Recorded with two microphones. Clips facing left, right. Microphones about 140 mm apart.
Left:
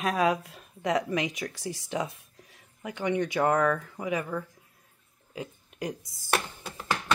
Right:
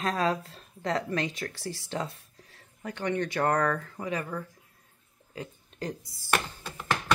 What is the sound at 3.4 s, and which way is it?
Speech, 5° left (ahead or behind).